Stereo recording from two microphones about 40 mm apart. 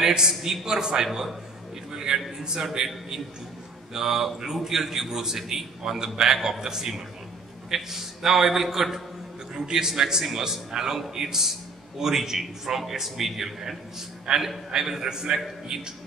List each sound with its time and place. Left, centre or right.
0.0 s a man's voice: centre
1.9 s a sound: centre
2.4 s a man's voice: centre
3.9 s a man's voice: centre